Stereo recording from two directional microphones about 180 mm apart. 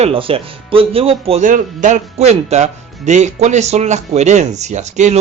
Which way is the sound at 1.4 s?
45° right (ahead or behind).